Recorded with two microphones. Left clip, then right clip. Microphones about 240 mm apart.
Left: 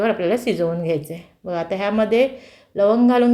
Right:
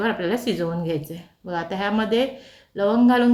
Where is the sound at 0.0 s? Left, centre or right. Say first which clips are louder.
Left 4 dB; centre.